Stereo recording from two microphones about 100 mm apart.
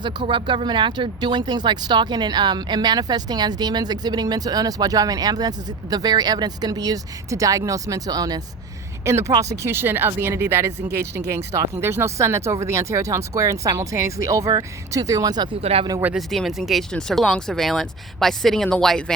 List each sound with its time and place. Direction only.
0.0 s speech: 50° right (ahead or behind)
9.0 s speech: 30° right (ahead or behind); by 15.5 s 45° right (ahead or behind)
15.6 s speech: 90° right
16.1 s speech: centre (ahead or behind)